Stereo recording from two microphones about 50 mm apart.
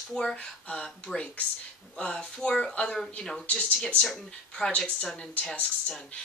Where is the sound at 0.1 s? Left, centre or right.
Centre.